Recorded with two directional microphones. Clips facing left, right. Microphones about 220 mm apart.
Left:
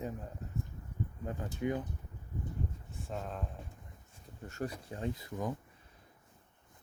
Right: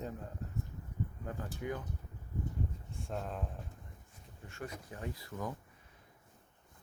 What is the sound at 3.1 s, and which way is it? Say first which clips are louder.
Speech: even; centre (ahead or behind).